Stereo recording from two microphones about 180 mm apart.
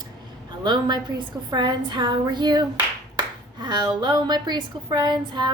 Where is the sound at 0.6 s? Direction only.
25° right (ahead or behind).